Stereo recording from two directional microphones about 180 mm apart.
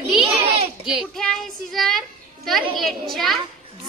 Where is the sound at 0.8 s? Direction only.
Centre (ahead or behind).